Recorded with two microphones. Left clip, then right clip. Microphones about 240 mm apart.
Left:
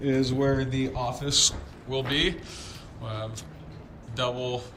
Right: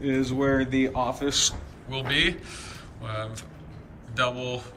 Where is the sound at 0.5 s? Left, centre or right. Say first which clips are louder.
Right 4 dB; left.